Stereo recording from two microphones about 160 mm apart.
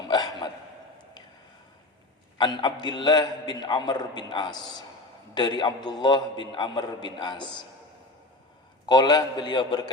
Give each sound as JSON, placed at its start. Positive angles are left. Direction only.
{"t": 0.1, "sound": "a sound", "side_deg": 25}
{"t": 2.4, "sound": "a man's voice", "side_deg": 30}
{"t": 8.9, "sound": "a man's voice", "side_deg": 25}